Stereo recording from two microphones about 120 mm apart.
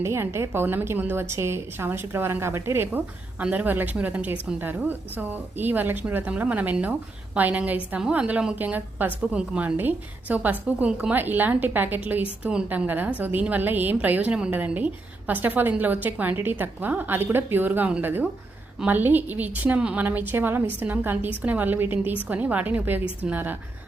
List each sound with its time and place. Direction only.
0.0 s a woman's voice: 20° right (ahead or behind)